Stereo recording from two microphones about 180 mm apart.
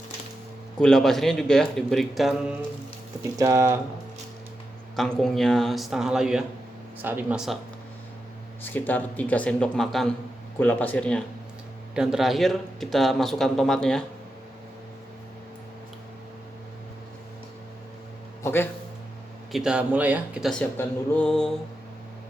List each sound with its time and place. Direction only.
0.8 s a man's voice: 5° left (ahead or behind)
3.3 s speech: 20° right (ahead or behind)
4.9 s a man's voice: centre (ahead or behind)
8.6 s a man's voice: 10° left (ahead or behind)
18.4 s speech: 10° left (ahead or behind)
19.5 s a man's voice: 5° right (ahead or behind)
20.5 s a man's voice: 10° left (ahead or behind)